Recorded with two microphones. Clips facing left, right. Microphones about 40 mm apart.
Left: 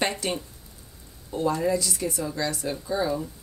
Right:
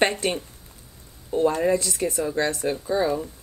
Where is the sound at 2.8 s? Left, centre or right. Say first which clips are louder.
Right 3 dB; right.